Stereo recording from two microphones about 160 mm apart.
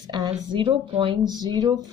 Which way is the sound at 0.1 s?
25° right (ahead or behind).